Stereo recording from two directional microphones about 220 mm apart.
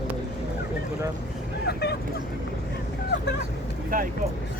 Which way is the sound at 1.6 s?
50° left (ahead or behind).